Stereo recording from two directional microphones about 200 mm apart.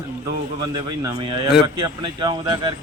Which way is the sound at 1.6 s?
20° right (ahead or behind).